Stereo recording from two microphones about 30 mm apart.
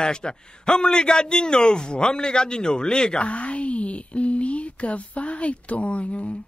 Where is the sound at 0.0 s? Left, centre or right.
Left.